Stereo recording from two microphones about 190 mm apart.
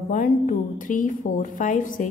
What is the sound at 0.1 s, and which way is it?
A woman's voice, 40° left (ahead or behind).